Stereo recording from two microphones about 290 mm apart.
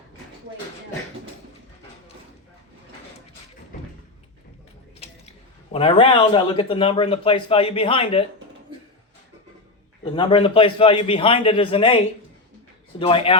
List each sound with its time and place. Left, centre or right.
5.7 s speech: centre
10.0 s speech: centre
13.0 s speech: centre